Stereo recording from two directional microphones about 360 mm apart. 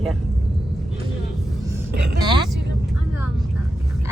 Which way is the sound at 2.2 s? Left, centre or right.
Centre.